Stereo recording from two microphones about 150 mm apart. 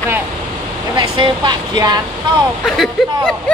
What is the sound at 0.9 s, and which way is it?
Speech, 30° right (ahead or behind).